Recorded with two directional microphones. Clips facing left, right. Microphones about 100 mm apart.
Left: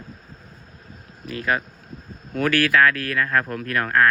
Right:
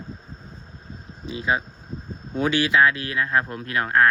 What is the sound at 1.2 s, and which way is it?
Speech, 20° right (ahead or behind).